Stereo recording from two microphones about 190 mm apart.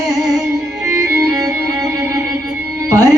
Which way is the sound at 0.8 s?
15° right (ahead or behind).